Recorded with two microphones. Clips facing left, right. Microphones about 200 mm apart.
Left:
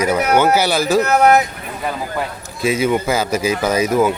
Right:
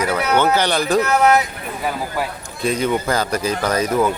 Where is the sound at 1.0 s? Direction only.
40° left (ahead or behind).